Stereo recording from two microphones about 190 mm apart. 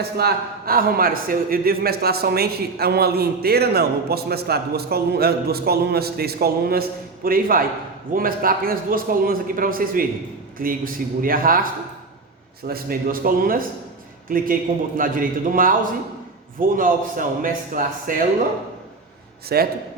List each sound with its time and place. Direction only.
0.2 s a man's voice: 55° right (ahead or behind)
12.6 s a man's voice: 50° right (ahead or behind)
19.5 s a man's voice: 55° right (ahead or behind)